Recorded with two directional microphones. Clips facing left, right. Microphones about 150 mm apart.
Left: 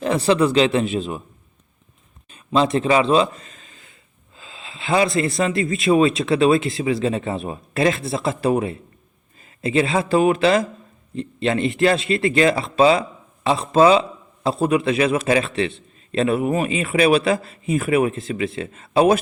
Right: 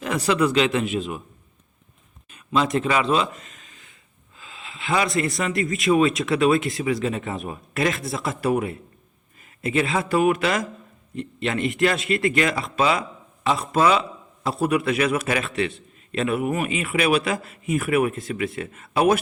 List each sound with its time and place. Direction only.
0.0 s a man's voice: 30° left (ahead or behind)
2.3 s a man's voice: 30° left (ahead or behind)